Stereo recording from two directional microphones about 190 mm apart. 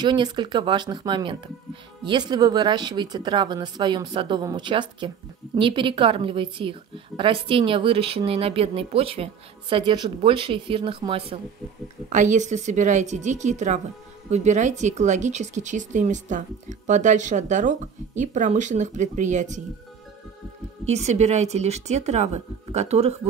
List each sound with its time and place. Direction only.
0.0 s a woman's voice: 25° right (ahead or behind)
12.1 s speech: 40° right (ahead or behind)
20.8 s speech: 35° right (ahead or behind)